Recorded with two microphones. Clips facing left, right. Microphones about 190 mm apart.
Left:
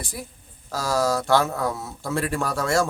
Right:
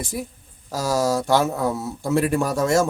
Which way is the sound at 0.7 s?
15° right (ahead or behind).